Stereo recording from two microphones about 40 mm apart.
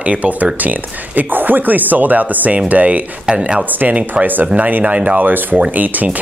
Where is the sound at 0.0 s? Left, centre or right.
Right.